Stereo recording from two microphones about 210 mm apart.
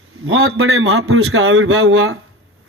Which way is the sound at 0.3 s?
90° right.